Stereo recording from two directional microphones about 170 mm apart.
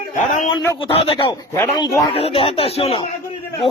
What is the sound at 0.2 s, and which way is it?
Speech, 50° left (ahead or behind).